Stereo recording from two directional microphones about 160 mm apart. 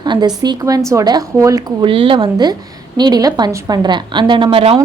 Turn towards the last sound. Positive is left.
turn(degrees=-35)  # may be behind; listen again after turning